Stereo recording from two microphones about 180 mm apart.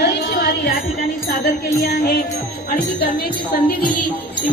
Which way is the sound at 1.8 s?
60° left (ahead or behind).